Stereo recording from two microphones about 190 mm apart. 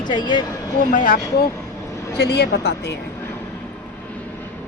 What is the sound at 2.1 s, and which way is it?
Speech, 60° left (ahead or behind).